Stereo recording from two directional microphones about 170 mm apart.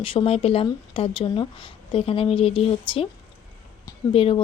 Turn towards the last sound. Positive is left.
turn(degrees=35)  # may be behind; listen again after turning